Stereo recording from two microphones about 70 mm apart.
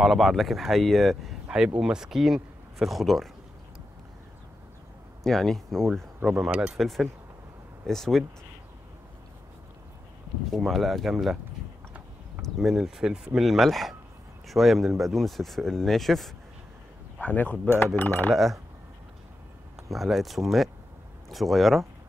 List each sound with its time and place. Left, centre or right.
0.0 s speech: centre
5.2 s speech: centre
10.5 s speech: centre
12.4 s speech: centre
17.2 s speech: left
18.3 s speech: centre
19.9 s speech: centre